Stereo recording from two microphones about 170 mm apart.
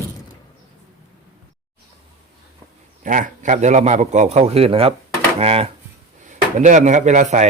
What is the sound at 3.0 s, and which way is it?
A man's voice, 50° right (ahead or behind).